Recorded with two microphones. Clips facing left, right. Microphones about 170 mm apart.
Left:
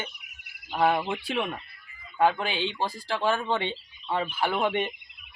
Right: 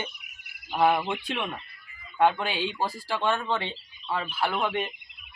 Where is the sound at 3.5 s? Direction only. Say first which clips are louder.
Left 2 dB; 20° left (ahead or behind).